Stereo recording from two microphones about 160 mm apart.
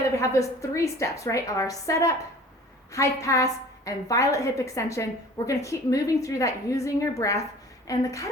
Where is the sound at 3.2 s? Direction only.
20° left (ahead or behind).